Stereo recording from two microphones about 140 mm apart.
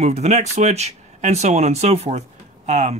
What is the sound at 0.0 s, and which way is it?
Speech, 50° right (ahead or behind).